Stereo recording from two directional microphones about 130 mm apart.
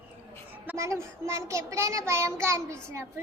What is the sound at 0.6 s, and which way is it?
A child's voice, 20° right (ahead or behind).